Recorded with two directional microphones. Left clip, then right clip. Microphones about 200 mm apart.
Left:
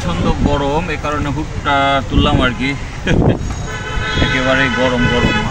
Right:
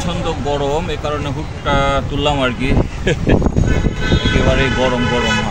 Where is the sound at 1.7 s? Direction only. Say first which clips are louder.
Left 3 dB; 5° right (ahead or behind).